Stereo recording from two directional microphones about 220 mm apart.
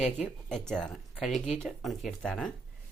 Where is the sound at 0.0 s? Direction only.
Centre (ahead or behind).